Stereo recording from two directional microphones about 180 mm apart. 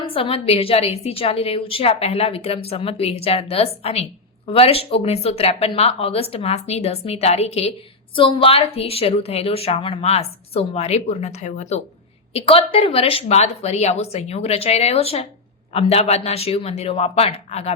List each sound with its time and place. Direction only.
0.0 s a woman's voice: 30° left (ahead or behind)